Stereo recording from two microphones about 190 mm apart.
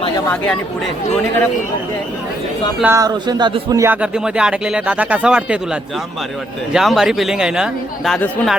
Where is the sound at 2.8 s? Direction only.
15° right (ahead or behind).